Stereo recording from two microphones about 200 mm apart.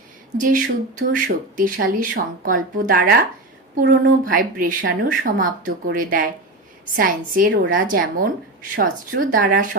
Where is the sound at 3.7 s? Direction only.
55° right (ahead or behind).